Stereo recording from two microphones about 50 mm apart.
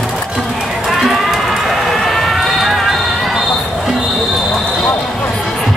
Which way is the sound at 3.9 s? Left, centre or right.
Centre.